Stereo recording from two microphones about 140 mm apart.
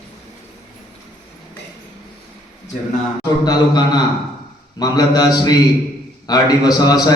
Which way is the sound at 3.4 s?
30° left (ahead or behind).